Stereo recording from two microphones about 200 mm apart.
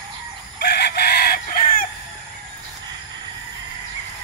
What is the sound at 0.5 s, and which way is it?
Chicken, 55° left (ahead or behind).